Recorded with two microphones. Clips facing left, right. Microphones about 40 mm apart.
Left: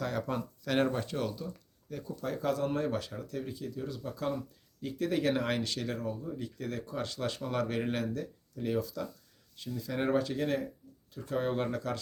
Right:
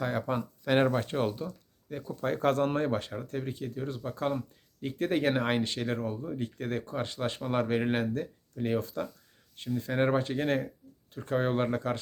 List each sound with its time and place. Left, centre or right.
0.0 s speech: right